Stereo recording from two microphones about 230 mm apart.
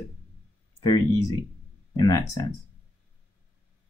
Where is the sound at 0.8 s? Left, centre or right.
Centre.